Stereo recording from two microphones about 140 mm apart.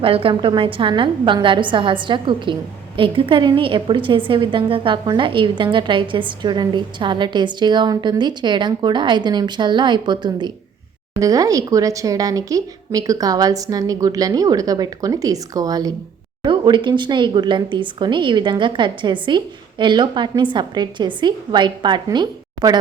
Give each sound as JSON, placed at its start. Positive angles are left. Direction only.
{"t": 0.0, "sound": "a woman's voice", "side_deg": -40}